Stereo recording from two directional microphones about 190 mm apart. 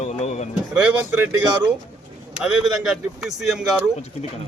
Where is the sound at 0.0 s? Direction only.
40° left (ahead or behind).